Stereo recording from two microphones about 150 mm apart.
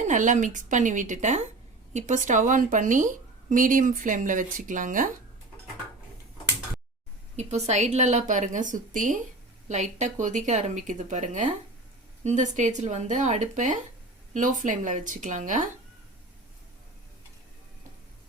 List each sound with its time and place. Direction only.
0.0 s a woman's voice: 55° right (ahead or behind)
7.3 s a woman's voice: 50° right (ahead or behind)